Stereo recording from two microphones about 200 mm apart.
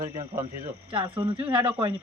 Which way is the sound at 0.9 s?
25° right (ahead or behind).